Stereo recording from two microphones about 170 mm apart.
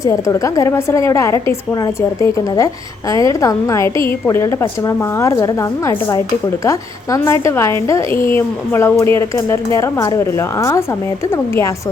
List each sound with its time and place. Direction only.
0.0 s a woman's voice: 20° left (ahead or behind)